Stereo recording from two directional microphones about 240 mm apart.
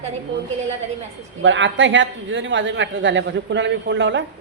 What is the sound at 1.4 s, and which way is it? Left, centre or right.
A woman's voice, right.